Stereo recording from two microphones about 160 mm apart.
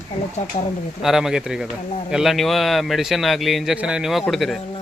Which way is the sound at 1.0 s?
5° right (ahead or behind).